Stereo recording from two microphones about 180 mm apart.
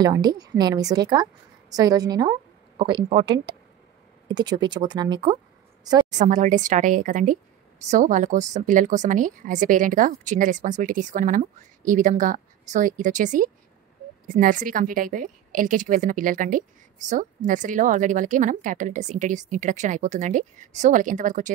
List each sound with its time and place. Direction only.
0.0 s a woman's voice: 20° right (ahead or behind)
6.0 s a woman's voice: 45° right (ahead or behind)